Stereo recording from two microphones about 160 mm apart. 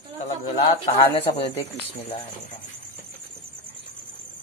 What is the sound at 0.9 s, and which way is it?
Speech, 40° left (ahead or behind).